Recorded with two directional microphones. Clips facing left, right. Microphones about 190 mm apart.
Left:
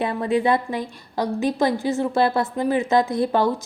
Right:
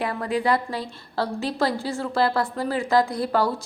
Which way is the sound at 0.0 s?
20° left (ahead or behind).